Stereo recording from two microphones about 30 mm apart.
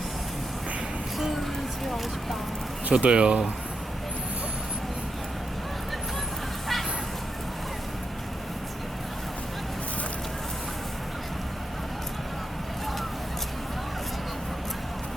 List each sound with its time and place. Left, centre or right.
2.9 s speech: right